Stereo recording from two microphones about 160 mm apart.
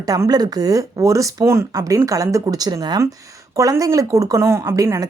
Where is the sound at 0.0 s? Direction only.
20° right (ahead or behind).